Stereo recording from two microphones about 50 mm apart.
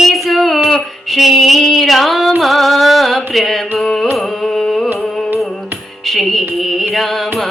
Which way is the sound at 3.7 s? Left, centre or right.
Centre.